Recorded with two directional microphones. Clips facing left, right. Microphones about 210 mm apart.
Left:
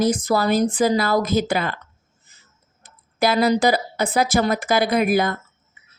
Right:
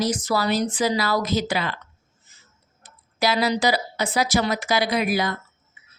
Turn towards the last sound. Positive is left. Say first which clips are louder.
# left 4 dB
turn(degrees=50)  # may be behind; listen again after turning